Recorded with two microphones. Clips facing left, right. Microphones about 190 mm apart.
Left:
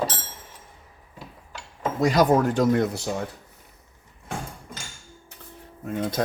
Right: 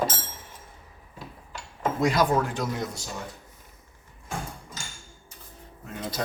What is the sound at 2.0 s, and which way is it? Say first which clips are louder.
Speech: left 5 dB; 40° left (ahead or behind).